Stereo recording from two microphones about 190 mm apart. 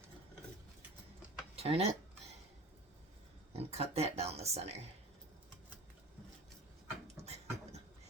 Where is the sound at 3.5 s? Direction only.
35° right (ahead or behind).